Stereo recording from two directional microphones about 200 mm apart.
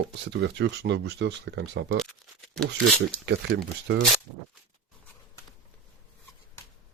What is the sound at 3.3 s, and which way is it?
Speech, 60° right (ahead or behind).